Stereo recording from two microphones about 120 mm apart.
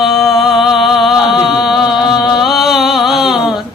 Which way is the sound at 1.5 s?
Centre (ahead or behind).